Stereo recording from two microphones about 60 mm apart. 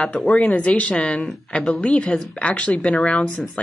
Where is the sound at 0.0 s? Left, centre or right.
Centre.